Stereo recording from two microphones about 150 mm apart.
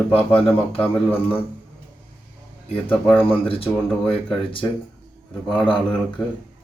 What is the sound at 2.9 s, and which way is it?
Speech, 10° left (ahead or behind).